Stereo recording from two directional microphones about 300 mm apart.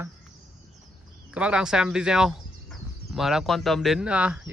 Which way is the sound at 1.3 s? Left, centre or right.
Centre.